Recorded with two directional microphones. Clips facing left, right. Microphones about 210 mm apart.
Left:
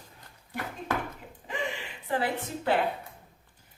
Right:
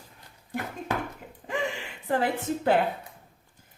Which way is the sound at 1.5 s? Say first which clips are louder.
Right 4 dB; 45° right (ahead or behind).